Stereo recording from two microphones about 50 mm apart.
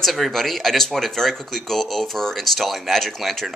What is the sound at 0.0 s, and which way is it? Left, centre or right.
Speech, centre.